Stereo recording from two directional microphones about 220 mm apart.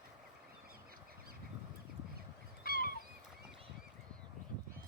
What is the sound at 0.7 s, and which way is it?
Duck, 45° right (ahead or behind).